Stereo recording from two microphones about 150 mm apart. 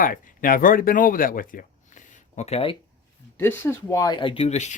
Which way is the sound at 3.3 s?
15° left (ahead or behind).